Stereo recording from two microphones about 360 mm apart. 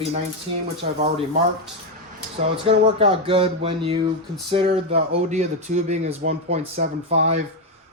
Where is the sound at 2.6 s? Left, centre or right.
Centre.